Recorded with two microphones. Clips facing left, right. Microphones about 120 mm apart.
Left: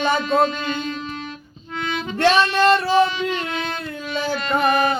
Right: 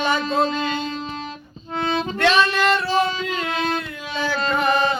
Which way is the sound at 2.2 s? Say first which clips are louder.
Left 3 dB; 30° left (ahead or behind).